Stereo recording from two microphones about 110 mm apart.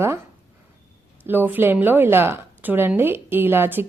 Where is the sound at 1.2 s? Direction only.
15° right (ahead or behind).